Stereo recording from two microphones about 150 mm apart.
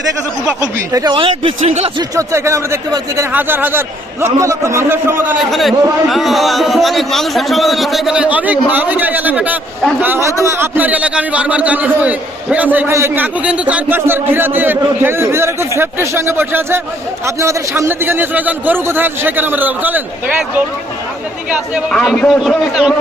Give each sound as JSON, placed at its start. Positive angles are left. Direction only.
{"t": 0.6, "sound": "speech", "side_deg": -25}
{"t": 1.1, "sound": "speech", "side_deg": -35}
{"t": 2.0, "sound": "a man's voice", "side_deg": -20}
{"t": 5.5, "sound": "a man's voice", "side_deg": 0}
{"t": 21.9, "sound": "a man's voice", "side_deg": 5}